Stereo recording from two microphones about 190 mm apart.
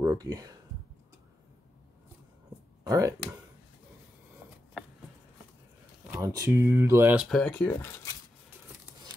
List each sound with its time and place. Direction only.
0.0 s speech: 20° right (ahead or behind)
2.9 s speech: 15° right (ahead or behind)
6.0 s speech: 15° right (ahead or behind)
7.2 s speech: 5° left (ahead or behind)